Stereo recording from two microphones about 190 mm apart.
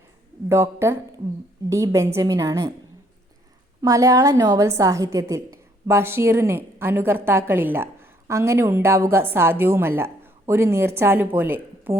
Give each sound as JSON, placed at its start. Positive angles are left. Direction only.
{"t": 0.4, "sound": "a woman's voice", "side_deg": -15}
{"t": 3.8, "sound": "a woman's voice", "side_deg": -15}